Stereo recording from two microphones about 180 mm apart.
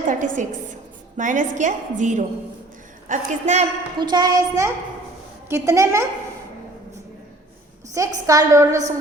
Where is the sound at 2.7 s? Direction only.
45° right (ahead or behind).